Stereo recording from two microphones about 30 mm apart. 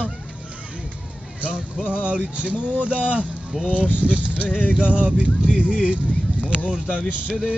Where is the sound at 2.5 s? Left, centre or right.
Left.